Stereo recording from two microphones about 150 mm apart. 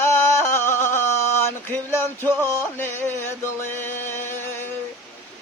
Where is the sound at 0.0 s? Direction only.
15° left (ahead or behind).